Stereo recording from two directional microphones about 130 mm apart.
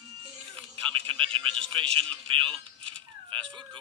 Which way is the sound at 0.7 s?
40° right (ahead or behind).